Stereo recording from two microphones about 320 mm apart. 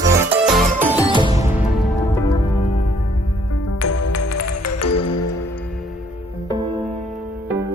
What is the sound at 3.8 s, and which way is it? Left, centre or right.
Music, left.